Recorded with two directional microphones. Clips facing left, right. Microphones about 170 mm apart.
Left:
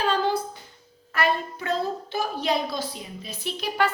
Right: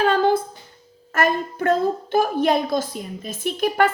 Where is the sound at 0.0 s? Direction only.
55° right (ahead or behind).